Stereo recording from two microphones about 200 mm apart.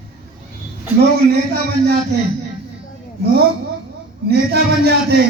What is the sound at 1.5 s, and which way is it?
Speech, 50° right (ahead or behind).